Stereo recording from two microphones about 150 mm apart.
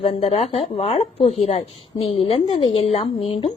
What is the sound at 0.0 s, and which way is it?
A woman's voice, 40° left (ahead or behind).